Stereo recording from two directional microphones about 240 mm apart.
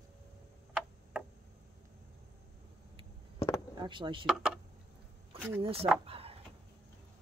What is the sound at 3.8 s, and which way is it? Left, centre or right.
Speech, centre.